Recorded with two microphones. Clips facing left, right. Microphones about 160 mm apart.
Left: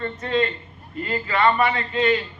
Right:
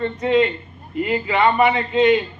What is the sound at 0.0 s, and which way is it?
A man's voice, 15° right (ahead or behind).